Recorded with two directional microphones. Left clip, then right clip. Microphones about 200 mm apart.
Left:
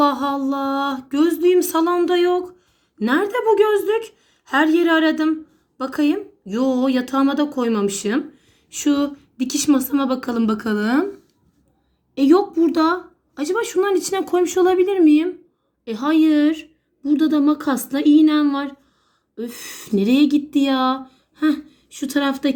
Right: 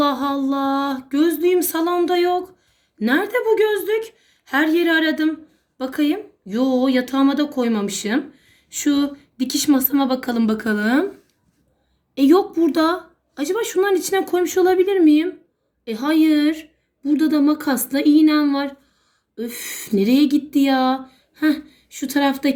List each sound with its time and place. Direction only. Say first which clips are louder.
0.0 s a sound: left 1 dB; 30° left (ahead or behind)
1.1 s speech: left 1 dB; 30° left (ahead or behind)
4.4 s speech: left 1 dB; 30° left (ahead or behind)
12.1 s speech: even; 20° left (ahead or behind)
16.4 s a woman's voice: left 1 dB; 20° left (ahead or behind)